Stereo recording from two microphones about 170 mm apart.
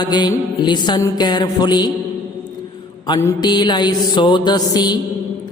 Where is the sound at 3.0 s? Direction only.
20° left (ahead or behind).